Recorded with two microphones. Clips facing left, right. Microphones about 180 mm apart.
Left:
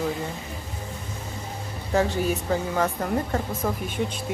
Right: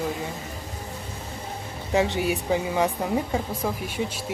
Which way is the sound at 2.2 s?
15° right (ahead or behind).